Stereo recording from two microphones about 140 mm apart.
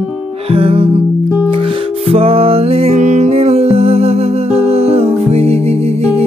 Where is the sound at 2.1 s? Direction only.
45° right (ahead or behind).